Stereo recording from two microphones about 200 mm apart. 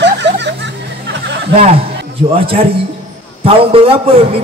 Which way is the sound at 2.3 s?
30° right (ahead or behind).